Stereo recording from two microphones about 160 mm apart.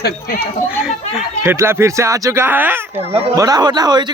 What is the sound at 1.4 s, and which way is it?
Speech, 15° right (ahead or behind).